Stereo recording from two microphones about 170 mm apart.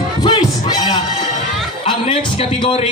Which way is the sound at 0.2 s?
25° left (ahead or behind).